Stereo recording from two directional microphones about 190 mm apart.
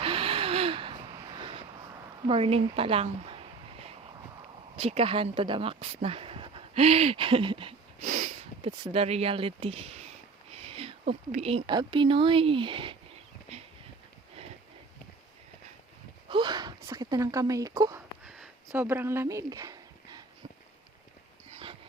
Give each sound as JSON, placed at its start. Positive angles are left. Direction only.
{"t": 0.0, "sound": "gasp", "side_deg": -30}
{"t": 2.2, "sound": "a woman's voice", "side_deg": -30}
{"t": 4.8, "sound": "speech", "side_deg": -30}
{"t": 16.3, "sound": "speech", "side_deg": -25}
{"t": 21.5, "sound": "dog", "side_deg": -30}